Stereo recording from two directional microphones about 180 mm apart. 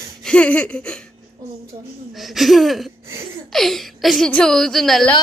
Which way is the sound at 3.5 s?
Centre (ahead or behind).